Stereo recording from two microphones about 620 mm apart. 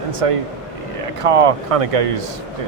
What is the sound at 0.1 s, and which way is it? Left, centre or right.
A man's voice, right.